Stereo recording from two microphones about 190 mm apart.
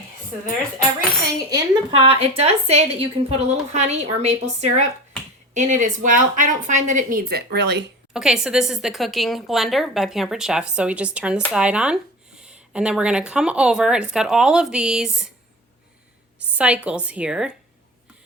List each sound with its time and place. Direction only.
1.4 s a woman's voice: 20° right (ahead or behind); by 7.9 s 65° right (ahead or behind)
8.1 s a woman's voice: 5° right (ahead or behind)
16.6 s a woman's voice: 5° right (ahead or behind)